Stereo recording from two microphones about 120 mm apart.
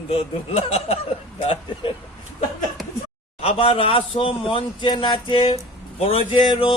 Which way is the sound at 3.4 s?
55° left (ahead or behind).